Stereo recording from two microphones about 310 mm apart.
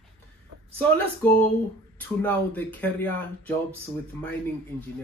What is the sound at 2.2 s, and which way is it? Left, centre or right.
Speech, centre.